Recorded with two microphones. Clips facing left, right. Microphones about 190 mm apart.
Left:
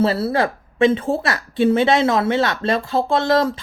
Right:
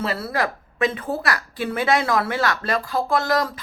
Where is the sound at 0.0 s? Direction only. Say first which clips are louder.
Left 6 dB; 30° left (ahead or behind).